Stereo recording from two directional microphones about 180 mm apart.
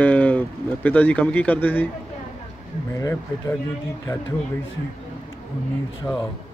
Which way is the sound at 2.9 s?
15° left (ahead or behind).